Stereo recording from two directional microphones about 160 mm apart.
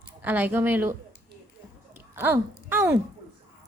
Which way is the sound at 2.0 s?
15° right (ahead or behind).